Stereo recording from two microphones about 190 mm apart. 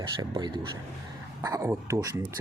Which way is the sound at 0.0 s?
20° right (ahead or behind).